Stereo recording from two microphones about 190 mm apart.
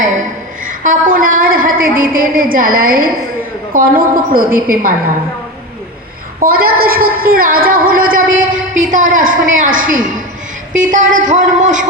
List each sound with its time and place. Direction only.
0.6 s a woman's voice: 45° right (ahead or behind)
6.4 s a man's voice: 50° right (ahead or behind)